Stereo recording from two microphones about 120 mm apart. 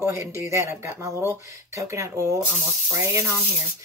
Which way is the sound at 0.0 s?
20° right (ahead or behind).